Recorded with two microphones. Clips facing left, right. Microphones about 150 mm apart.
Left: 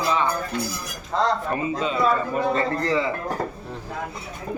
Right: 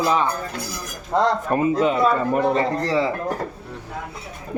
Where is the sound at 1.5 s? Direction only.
55° right (ahead or behind).